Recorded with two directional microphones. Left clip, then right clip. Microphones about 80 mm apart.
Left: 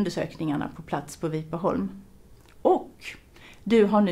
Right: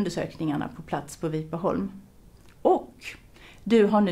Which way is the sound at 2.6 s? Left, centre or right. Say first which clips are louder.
Even; centre.